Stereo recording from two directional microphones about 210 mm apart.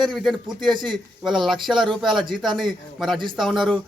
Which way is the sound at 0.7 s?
20° right (ahead or behind).